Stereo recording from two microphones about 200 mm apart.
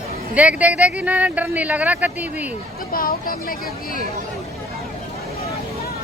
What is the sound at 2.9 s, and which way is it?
Speech, 45° left (ahead or behind).